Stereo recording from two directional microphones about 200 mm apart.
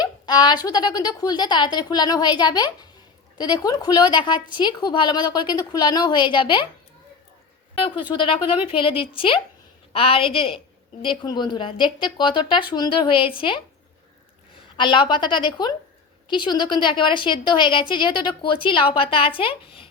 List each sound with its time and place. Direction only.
0.0 s a woman's voice: 20° left (ahead or behind)
7.8 s a woman's voice: 25° left (ahead or behind)